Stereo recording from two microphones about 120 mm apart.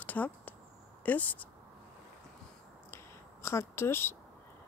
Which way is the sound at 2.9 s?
25° left (ahead or behind).